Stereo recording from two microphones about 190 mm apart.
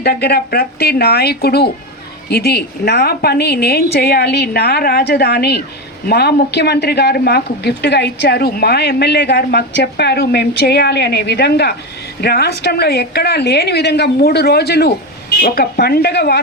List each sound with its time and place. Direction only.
0.0 s speech: 55° left (ahead or behind)